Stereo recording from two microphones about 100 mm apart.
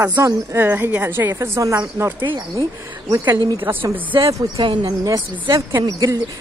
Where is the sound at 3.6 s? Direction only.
20° right (ahead or behind).